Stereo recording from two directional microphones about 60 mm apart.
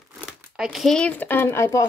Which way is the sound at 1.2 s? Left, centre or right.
Left.